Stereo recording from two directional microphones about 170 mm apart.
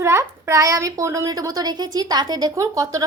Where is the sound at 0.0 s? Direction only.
15° right (ahead or behind).